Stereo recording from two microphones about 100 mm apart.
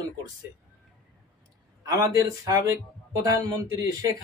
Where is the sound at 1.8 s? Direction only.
40° right (ahead or behind).